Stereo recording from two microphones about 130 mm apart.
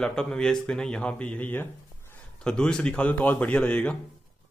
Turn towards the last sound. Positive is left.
turn(degrees=10)  # may be behind; listen again after turning